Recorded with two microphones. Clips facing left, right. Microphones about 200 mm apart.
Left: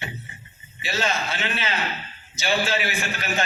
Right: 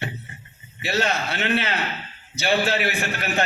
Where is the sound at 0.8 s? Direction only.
65° right (ahead or behind).